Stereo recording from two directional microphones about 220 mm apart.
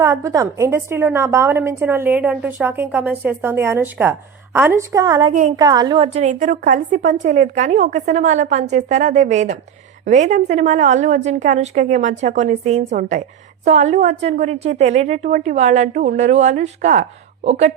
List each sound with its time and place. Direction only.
0.0 s a woman's voice: 15° right (ahead or behind)
5.3 s a woman's voice: 35° right (ahead or behind)
5.5 s a woman's voice: 15° right (ahead or behind)
6.1 s a woman's voice: 35° right (ahead or behind)